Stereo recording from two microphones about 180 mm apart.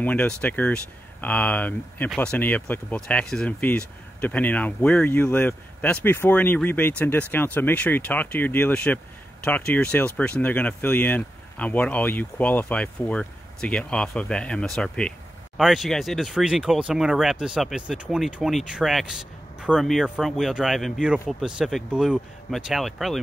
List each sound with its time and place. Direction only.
0.0 s speech: 10° left (ahead or behind)